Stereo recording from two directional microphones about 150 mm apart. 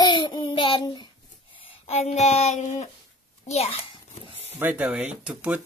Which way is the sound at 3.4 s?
45° left (ahead or behind).